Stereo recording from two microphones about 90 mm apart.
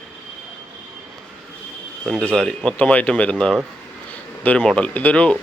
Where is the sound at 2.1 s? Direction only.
10° left (ahead or behind).